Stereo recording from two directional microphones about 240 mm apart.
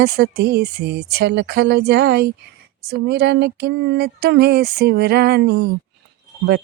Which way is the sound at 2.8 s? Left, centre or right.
Right.